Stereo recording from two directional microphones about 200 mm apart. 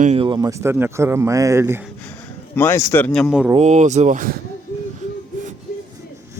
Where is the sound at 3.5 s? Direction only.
35° right (ahead or behind).